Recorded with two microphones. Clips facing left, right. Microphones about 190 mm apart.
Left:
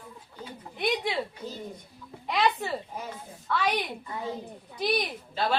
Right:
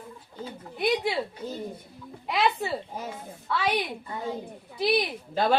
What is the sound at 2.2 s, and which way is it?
A woman's voice, 5° right (ahead or behind).